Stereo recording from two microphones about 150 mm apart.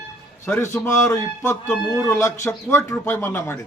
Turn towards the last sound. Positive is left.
turn(degrees=15)  # may be behind; listen again after turning